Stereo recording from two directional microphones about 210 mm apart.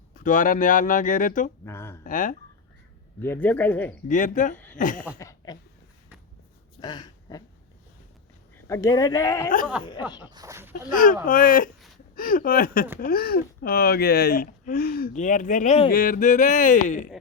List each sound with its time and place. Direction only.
0.2 s speech: 40° left (ahead or behind)
1.6 s speech: 10° left (ahead or behind)
2.0 s speech: 40° left (ahead or behind)
3.2 s speech: 10° left (ahead or behind)
4.1 s speech: 35° left (ahead or behind)
4.5 s speech: 5° left (ahead or behind)
4.8 s speech: 40° left (ahead or behind)
5.1 s a sound: 15° left (ahead or behind)
6.7 s a sound: 20° left (ahead or behind)
8.6 s speech: 15° left (ahead or behind)
10.3 s speech: 15° right (ahead or behind)
10.9 s speech: 40° left (ahead or behind)